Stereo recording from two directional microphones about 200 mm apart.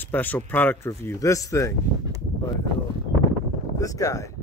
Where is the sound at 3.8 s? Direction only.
15° left (ahead or behind).